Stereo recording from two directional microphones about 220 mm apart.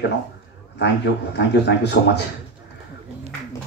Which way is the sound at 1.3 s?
50° left (ahead or behind).